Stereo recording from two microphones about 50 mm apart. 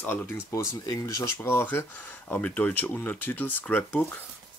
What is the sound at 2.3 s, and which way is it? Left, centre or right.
Speech, left.